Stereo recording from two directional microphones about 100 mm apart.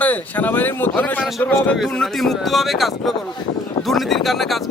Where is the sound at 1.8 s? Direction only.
5° left (ahead or behind).